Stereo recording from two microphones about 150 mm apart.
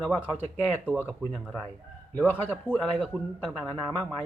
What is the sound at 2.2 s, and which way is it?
Speech, 15° left (ahead or behind).